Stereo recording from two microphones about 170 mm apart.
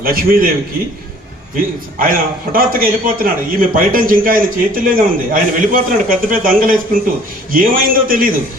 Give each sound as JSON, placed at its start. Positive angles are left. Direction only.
{"t": 0.0, "sound": "a man's voice", "side_deg": -60}
{"t": 1.5, "sound": "a man's voice", "side_deg": -55}